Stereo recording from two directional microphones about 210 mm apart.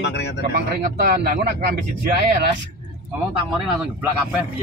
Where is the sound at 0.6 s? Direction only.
50° right (ahead or behind).